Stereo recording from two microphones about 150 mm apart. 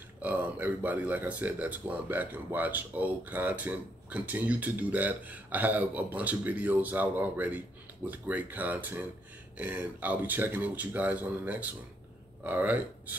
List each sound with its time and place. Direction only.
0.2 s speech: 10° right (ahead or behind)